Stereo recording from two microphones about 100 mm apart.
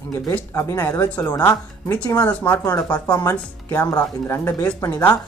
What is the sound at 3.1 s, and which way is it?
Speech, 35° left (ahead or behind).